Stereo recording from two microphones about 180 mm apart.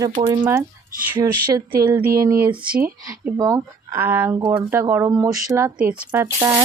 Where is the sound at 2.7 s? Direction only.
55° right (ahead or behind).